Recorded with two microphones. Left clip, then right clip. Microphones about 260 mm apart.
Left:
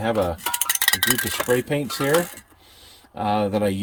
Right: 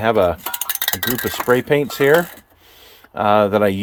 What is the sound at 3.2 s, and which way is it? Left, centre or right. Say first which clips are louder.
Speech: right 8 dB; centre.